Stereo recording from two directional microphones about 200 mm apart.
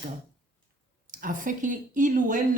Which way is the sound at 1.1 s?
40° right (ahead or behind).